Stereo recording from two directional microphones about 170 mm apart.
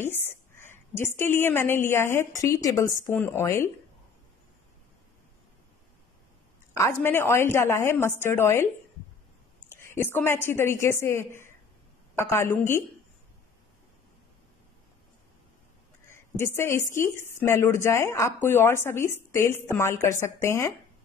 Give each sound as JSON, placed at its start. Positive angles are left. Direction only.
{"t": 0.0, "sound": "a woman's voice", "side_deg": 15}
{"t": 6.7, "sound": "a woman's voice", "side_deg": 15}
{"t": 9.7, "sound": "a woman's voice", "side_deg": 15}
{"t": 16.1, "sound": "a woman's voice", "side_deg": 15}